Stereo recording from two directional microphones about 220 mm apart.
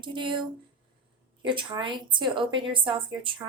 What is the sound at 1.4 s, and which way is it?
A woman's voice, 20° right (ahead or behind).